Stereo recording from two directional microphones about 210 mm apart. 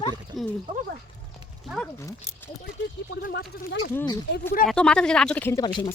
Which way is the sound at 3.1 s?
50° left (ahead or behind).